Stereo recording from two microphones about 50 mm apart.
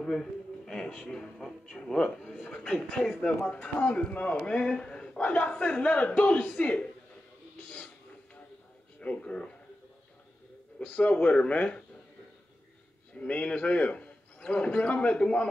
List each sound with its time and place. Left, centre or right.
0.0 s speech: centre
3.5 s a man's voice: left
5.2 s a man's voice: left
7.5 s a sound: left
9.0 s a man's voice: left
10.8 s a man's voice: left
13.2 s a man's voice: left